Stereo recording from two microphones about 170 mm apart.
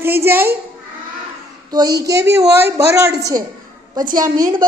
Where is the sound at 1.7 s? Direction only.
20° right (ahead or behind).